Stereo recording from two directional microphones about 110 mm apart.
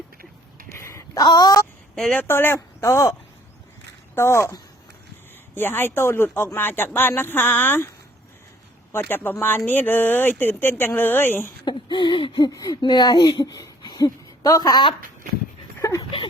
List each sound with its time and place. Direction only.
0.8 s a sound: 25° left (ahead or behind)
1.2 s speech: 40° left (ahead or behind)
2.0 s speech: 5° left (ahead or behind)
2.2 s speech: 20° left (ahead or behind)
5.5 s speech: 20° left (ahead or behind)
8.9 s speech: 20° left (ahead or behind)
11.6 s a sound: 45° left (ahead or behind)
12.5 s speech: 30° left (ahead or behind)
15.8 s dog: 30° left (ahead or behind)